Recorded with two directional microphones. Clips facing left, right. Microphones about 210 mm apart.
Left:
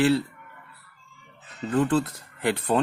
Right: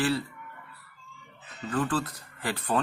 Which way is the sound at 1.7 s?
25° left (ahead or behind).